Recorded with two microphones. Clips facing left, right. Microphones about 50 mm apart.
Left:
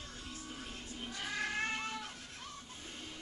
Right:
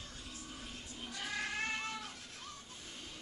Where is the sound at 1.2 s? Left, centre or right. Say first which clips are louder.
Left 2 dB; centre.